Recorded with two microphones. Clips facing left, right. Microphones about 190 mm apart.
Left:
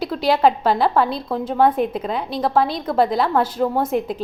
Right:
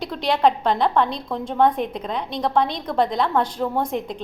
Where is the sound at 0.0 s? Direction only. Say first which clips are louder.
Left 3 dB; 5° left (ahead or behind).